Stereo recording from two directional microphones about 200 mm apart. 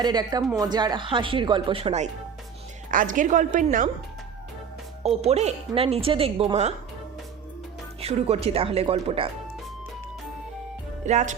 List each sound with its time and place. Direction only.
0.0 s a woman's voice: 20° right (ahead or behind)
2.9 s a woman's voice: 40° right (ahead or behind)
5.2 s a woman's voice: 35° right (ahead or behind)
8.0 s a woman's voice: 30° right (ahead or behind)
11.0 s a woman's voice: 35° right (ahead or behind)